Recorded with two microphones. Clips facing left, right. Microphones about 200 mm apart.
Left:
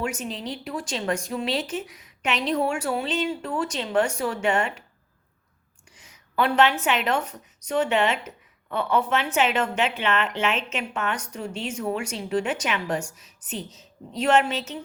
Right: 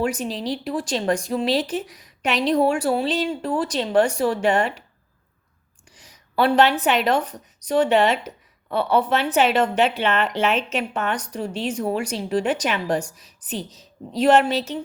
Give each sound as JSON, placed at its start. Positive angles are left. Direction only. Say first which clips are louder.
{"t": 0.0, "sound": "speech", "louder": "right 5 dB", "side_deg": -35}
{"t": 5.9, "sound": "a woman's voice", "louder": "right 4 dB", "side_deg": -35}